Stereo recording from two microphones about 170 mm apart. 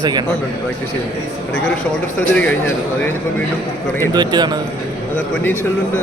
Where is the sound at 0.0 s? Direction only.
25° right (ahead or behind).